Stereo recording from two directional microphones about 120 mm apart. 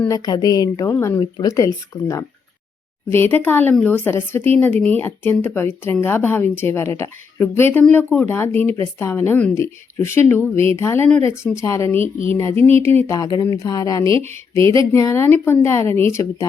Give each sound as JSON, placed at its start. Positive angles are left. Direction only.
{"t": 0.1, "sound": "a woman's voice", "side_deg": 35}
{"t": 0.9, "sound": "speech", "side_deg": 20}
{"t": 1.2, "sound": "speech", "side_deg": 30}